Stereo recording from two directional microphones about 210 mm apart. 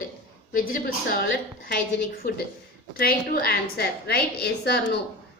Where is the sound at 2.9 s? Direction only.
45° left (ahead or behind).